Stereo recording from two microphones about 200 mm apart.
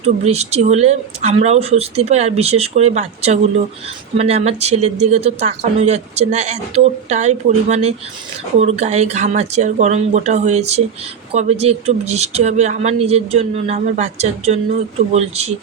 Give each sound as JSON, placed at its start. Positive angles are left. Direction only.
{"t": 0.0, "sound": "speech", "side_deg": -30}